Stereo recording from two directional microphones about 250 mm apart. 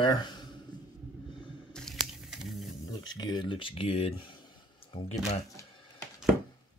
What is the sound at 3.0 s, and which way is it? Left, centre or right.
Speech, centre.